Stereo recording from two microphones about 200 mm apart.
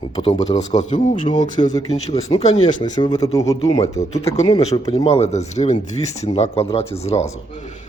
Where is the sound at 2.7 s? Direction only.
40° left (ahead or behind).